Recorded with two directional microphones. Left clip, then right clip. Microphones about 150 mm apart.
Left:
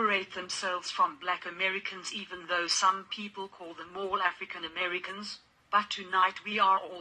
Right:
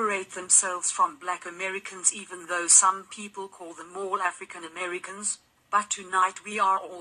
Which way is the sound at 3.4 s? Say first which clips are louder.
Right 3 dB; 30° right (ahead or behind).